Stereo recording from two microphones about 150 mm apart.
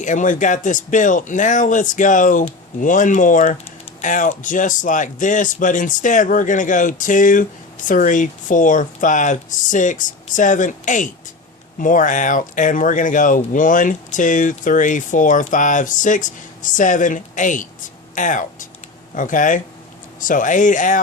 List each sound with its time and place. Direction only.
0.0 s speech: 55° left (ahead or behind)